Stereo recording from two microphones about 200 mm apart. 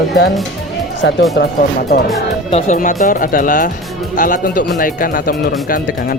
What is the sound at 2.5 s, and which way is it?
Speech, 40° left (ahead or behind).